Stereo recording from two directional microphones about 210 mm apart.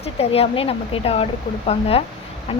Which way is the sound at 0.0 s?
30° left (ahead or behind).